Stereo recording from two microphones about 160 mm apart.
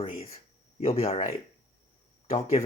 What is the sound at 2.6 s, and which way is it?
Speech, 40° left (ahead or behind).